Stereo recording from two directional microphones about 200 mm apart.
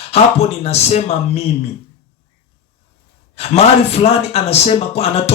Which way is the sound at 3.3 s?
30° left (ahead or behind).